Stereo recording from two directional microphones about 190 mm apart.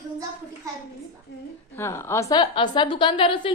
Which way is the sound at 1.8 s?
15° left (ahead or behind).